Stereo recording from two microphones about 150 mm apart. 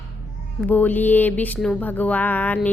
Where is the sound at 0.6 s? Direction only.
10° left (ahead or behind).